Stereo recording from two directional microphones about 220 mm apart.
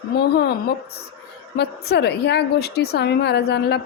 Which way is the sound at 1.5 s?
50° left (ahead or behind).